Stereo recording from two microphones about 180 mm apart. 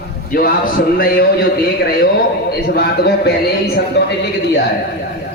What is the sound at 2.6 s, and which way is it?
A man's voice, 60° left (ahead or behind).